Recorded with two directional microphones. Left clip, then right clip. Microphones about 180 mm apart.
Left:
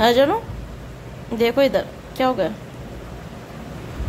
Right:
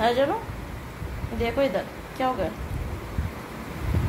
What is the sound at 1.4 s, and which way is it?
A woman's voice, 45° left (ahead or behind).